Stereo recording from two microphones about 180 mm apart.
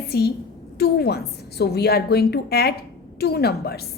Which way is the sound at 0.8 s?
65° left (ahead or behind).